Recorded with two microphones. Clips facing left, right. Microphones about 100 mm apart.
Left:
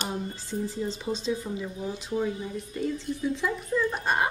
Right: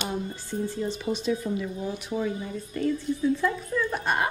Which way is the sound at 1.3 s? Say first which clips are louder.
Right 3 dB; 25° left (ahead or behind).